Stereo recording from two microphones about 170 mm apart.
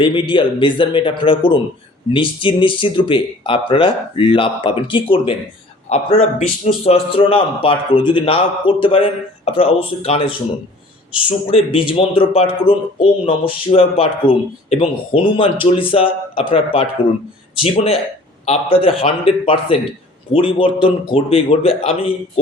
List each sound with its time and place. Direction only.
0.0 s a man's voice: 30° left (ahead or behind)
11.5 s speech: 35° left (ahead or behind)